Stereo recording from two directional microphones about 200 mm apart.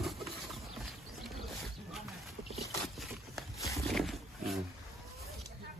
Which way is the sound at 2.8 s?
Centre (ahead or behind).